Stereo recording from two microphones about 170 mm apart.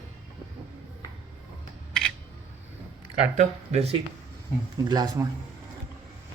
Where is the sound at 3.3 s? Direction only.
40° right (ahead or behind).